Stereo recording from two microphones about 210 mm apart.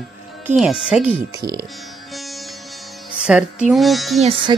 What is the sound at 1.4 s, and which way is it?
Speech, 20° right (ahead or behind).